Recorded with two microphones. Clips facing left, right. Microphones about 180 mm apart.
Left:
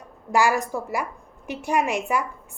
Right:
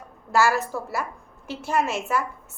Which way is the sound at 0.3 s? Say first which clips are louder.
Even; 15° left (ahead or behind).